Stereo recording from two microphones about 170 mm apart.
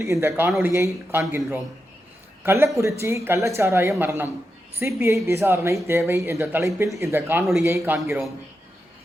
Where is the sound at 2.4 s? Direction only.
15° right (ahead or behind).